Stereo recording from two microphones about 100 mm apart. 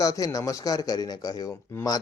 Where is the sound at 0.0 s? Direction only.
35° left (ahead or behind).